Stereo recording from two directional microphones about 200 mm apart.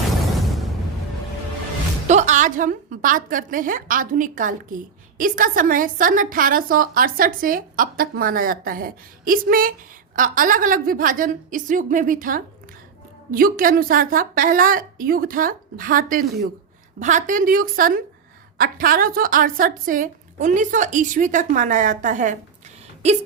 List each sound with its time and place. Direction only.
2.0 s a woman's voice: 35° right (ahead or behind)